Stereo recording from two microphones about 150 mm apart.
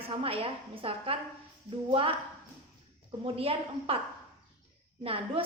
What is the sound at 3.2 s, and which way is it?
Speech, 40° right (ahead or behind).